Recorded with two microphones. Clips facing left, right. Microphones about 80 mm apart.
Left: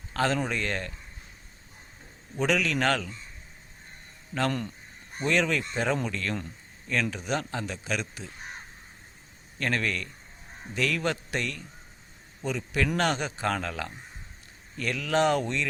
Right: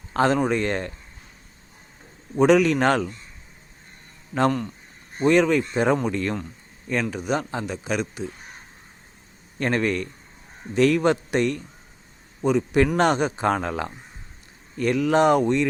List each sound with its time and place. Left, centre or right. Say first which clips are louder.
0.1 s speech: right 7 dB; right
2.3 s speech: right 10 dB; right
5.2 s a man's voice: right 8 dB; centre
9.6 s a man's voice: right 6 dB; right